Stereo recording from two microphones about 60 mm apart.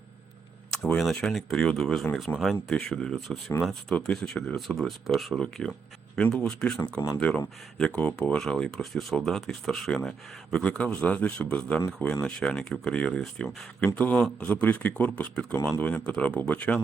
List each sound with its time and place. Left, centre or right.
0.7 s speech: centre
2.3 s speech: left
2.6 s speech: centre
8.4 s speech: centre
13.8 s speech: left
14.6 s speech: left